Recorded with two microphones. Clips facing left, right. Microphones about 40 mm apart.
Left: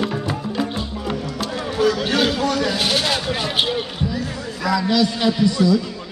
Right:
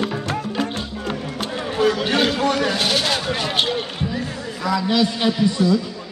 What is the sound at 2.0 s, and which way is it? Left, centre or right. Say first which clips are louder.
Speech: even; centre.